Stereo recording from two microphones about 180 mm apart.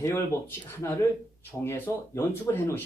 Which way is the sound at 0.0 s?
15° left (ahead or behind).